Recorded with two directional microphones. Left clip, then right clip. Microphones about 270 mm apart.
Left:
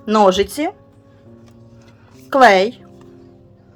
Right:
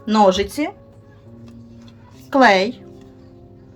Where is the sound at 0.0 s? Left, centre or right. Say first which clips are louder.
Left 2 dB; centre.